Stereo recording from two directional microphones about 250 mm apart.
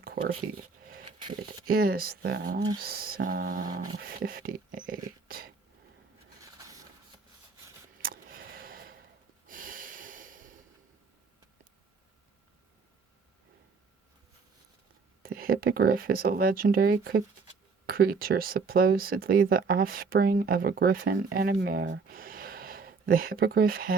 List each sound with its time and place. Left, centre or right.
0.0 s speech: right
1.0 s a sound: centre
1.5 s speech: right
6.6 s printer: centre
8.0 s a sound: right
9.5 s snort: right
15.2 s speech: right